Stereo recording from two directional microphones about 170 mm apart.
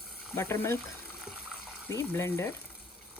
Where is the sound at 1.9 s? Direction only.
15° left (ahead or behind).